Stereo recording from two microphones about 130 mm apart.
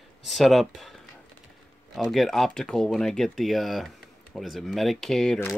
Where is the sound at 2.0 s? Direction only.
Centre (ahead or behind).